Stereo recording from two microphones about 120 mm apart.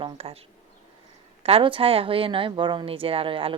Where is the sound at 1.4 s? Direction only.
50° right (ahead or behind).